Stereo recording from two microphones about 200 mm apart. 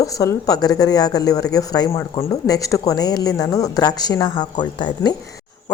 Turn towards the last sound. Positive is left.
turn(degrees=20)  # may be behind; listen again after turning